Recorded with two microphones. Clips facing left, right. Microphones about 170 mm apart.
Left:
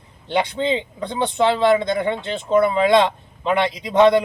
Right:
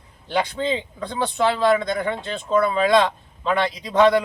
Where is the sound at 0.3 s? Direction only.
20° left (ahead or behind).